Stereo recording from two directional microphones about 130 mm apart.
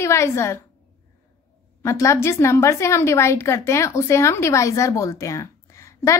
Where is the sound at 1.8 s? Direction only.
20° left (ahead or behind).